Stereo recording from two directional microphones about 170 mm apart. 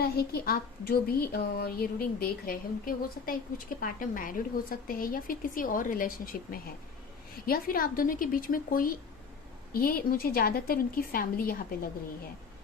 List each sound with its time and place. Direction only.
0.0 s a woman's voice: 65° left (ahead or behind)